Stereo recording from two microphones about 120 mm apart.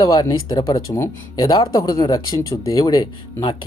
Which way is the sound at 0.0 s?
30° left (ahead or behind).